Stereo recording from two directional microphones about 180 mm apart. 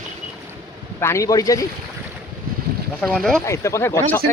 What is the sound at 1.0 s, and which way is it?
Speech, 15° left (ahead or behind).